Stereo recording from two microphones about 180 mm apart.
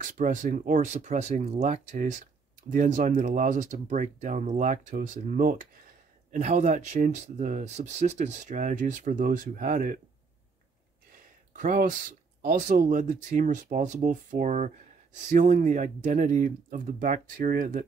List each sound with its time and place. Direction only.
0.0 s speech: 45° right (ahead or behind)
11.5 s speech: 45° right (ahead or behind)